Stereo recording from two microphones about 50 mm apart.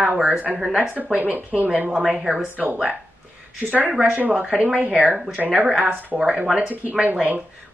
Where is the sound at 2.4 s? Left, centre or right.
Right.